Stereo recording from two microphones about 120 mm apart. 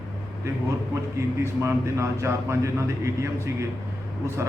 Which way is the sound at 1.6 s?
25° right (ahead or behind).